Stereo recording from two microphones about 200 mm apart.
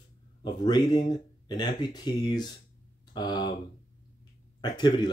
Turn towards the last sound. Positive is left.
turn(degrees=20)  # may be behind; listen again after turning